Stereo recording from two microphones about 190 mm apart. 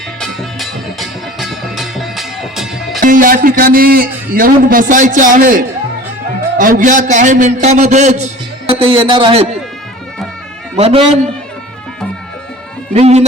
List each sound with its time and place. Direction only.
0.2 s music: centre (ahead or behind)
3.0 s a man's voice: 45° right (ahead or behind)
8.8 s a man's voice: 25° right (ahead or behind)
10.8 s a man's voice: 30° right (ahead or behind)
12.9 s a man's voice: 35° right (ahead or behind)